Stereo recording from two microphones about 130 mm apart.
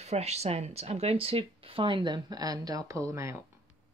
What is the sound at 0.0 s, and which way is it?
Speech, 55° right (ahead or behind).